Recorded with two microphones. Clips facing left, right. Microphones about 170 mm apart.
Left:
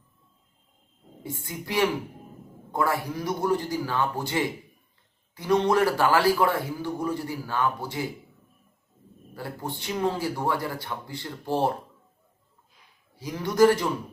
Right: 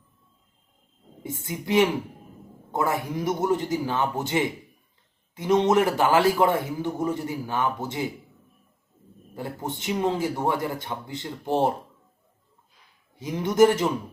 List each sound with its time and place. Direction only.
1.2 s a man's voice: 20° right (ahead or behind)
9.3 s a man's voice: 20° right (ahead or behind)
13.1 s a man's voice: 20° right (ahead or behind)